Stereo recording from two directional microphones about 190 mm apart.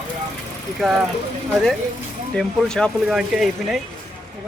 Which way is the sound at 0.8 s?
Centre (ahead or behind).